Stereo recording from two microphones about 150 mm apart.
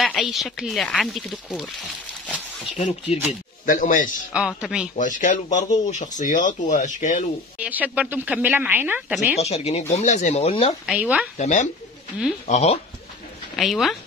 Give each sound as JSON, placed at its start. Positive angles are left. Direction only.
{"t": 0.0, "sound": "speech", "side_deg": 0}
{"t": 2.8, "sound": "speech", "side_deg": 45}
{"t": 3.6, "sound": "speech", "side_deg": 60}
{"t": 4.3, "sound": "speech", "side_deg": -5}
{"t": 4.9, "sound": "speech", "side_deg": 60}
{"t": 7.5, "sound": "a woman's voice", "side_deg": -10}
{"t": 9.4, "sound": "speech", "side_deg": 45}
{"t": 10.9, "sound": "a woman's voice", "side_deg": -10}
{"t": 11.3, "sound": "speech", "side_deg": 55}
{"t": 13.6, "sound": "speech", "side_deg": 0}